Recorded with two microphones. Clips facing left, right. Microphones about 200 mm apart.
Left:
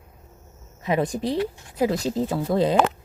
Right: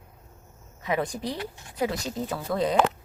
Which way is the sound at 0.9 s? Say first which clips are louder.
Left 5 dB; 25° left (ahead or behind).